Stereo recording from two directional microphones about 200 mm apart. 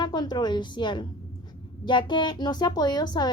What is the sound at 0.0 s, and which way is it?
A woman's voice, 20° left (ahead or behind).